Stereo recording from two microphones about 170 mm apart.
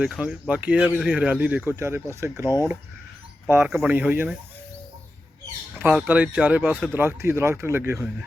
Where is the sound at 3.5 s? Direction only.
10° right (ahead or behind).